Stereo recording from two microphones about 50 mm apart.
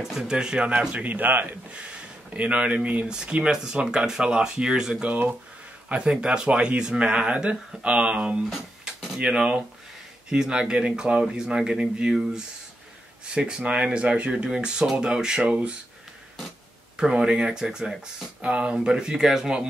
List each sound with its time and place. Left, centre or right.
0.0 s speech: centre
1.0 s speech: right
1.7 s speech: right
3.4 s speech: centre
5.0 s speech: right
5.9 s speech: right
8.5 s music: centre
9.2 s speech: centre
16.9 s speech: centre